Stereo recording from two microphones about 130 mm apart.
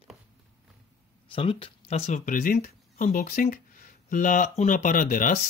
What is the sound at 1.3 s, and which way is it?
Speech, 45° left (ahead or behind).